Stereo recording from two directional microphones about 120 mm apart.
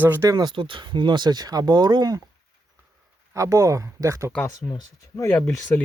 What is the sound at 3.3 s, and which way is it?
Speech, 25° right (ahead or behind).